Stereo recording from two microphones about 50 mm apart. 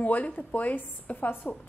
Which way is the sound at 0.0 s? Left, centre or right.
Left.